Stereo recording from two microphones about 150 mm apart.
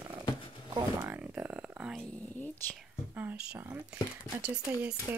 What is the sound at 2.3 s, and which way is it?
Speech, 10° left (ahead or behind).